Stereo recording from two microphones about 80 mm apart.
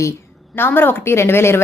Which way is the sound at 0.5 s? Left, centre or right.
Left.